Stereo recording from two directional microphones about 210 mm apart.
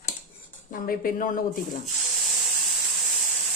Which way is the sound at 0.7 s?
40° left (ahead or behind).